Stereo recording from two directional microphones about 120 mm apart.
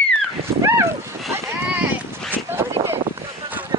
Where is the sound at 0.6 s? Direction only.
25° right (ahead or behind).